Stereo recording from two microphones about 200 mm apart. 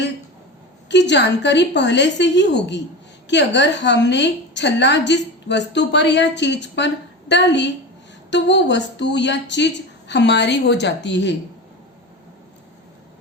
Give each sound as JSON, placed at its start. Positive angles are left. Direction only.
{"t": 0.9, "sound": "a woman's voice", "side_deg": 60}